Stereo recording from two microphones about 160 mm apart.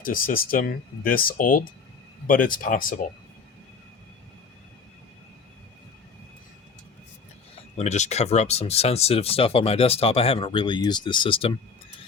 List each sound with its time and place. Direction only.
0.0 s speech: 60° left (ahead or behind)
7.8 s speech: 45° left (ahead or behind)